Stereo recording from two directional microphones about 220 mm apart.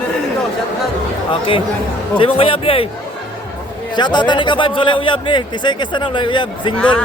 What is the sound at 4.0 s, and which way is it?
Speech, 20° left (ahead or behind).